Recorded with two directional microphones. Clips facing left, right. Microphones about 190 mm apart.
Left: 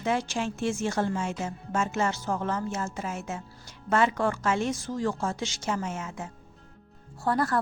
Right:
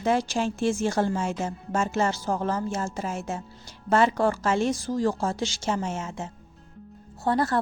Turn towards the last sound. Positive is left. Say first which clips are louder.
# right 2 dB
turn(degrees=-25)  # may be behind; listen again after turning